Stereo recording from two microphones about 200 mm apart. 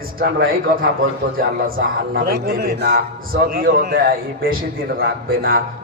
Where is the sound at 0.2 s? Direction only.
45° right (ahead or behind).